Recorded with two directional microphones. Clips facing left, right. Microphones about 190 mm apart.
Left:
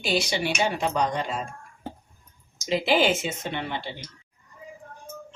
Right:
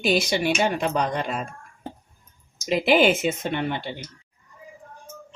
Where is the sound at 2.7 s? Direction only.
55° right (ahead or behind).